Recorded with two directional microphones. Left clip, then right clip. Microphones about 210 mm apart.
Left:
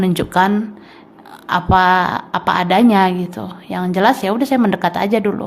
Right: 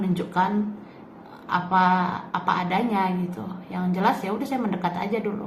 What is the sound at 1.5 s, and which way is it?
Speech, 60° left (ahead or behind).